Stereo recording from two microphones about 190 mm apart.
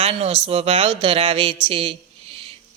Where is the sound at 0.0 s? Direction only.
30° right (ahead or behind).